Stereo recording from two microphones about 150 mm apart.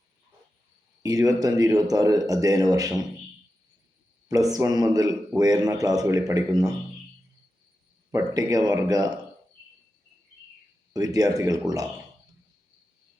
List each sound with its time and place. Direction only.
1.0 s a man's voice: 25° right (ahead or behind)
4.3 s a man's voice: 25° right (ahead or behind)
8.1 s a man's voice: 25° right (ahead or behind)
10.9 s a man's voice: 25° right (ahead or behind)